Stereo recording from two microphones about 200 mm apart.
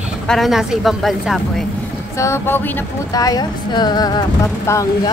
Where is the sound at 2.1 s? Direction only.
15° left (ahead or behind).